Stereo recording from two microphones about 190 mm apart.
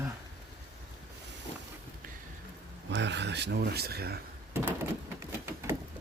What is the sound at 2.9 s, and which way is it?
Speech, 70° right (ahead or behind).